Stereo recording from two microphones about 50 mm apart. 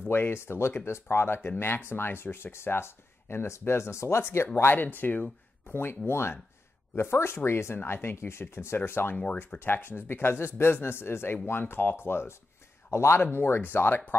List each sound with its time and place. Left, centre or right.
0.1 s speech: left
4.2 s speech: left
4.7 s speech: left
9.1 s speech: left
9.6 s speech: left
12.9 s speech: left
13.2 s speech: left